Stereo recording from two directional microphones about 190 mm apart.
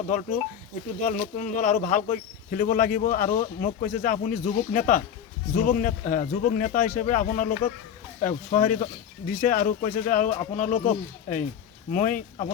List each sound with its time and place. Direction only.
0.1 s speech: 40° left (ahead or behind)